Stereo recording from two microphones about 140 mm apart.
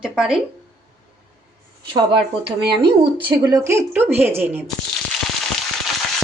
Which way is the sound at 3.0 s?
40° right (ahead or behind).